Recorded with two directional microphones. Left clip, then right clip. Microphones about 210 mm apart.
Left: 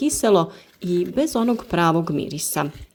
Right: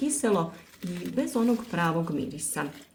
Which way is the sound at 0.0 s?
40° left (ahead or behind).